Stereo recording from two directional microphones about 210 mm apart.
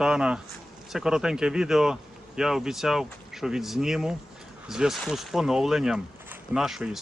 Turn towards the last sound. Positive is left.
turn(degrees=0)  # may be behind; listen again after turning